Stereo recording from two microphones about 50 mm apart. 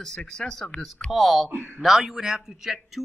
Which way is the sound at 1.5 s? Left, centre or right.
Right.